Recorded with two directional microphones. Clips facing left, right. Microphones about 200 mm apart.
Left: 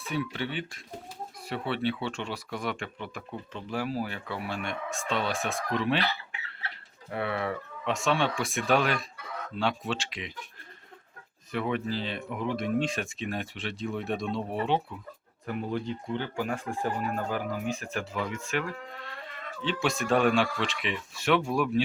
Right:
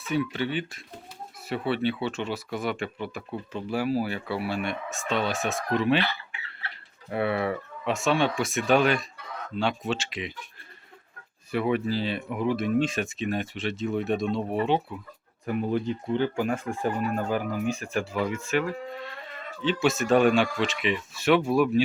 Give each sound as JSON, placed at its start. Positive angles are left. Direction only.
{"t": 0.0, "sound": "speech", "side_deg": 0}
{"t": 7.1, "sound": "speech", "side_deg": -15}
{"t": 11.5, "sound": "speech", "side_deg": -10}
{"t": 15.4, "sound": "speech", "side_deg": -15}